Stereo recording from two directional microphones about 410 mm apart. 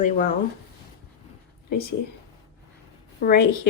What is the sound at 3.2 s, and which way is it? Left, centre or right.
Speech, left.